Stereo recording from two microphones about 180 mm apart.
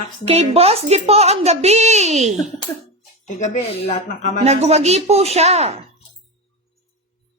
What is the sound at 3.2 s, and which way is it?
Speech, 40° left (ahead or behind).